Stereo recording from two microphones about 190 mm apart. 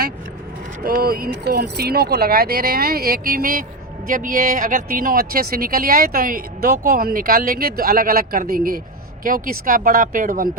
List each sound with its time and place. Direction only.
0.8 s speech: 50° right (ahead or behind)